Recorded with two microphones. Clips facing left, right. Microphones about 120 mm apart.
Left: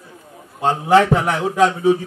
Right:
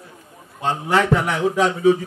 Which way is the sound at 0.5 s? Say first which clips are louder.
Left 5 dB; 40° left (ahead or behind).